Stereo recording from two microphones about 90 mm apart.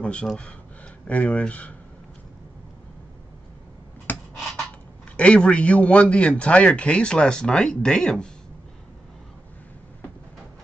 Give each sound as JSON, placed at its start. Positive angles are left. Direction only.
{"t": 0.0, "sound": "a man's voice", "side_deg": 10}
{"t": 4.1, "sound": "beatboxing", "side_deg": 20}
{"t": 5.1, "sound": "a man's voice", "side_deg": 10}